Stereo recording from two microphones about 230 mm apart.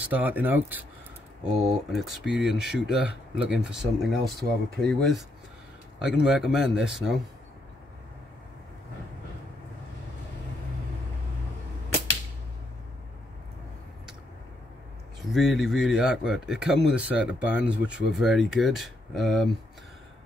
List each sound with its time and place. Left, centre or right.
0.1 s speech: centre
15.3 s speech: centre